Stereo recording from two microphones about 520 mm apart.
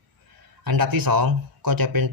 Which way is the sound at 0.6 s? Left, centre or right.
Right.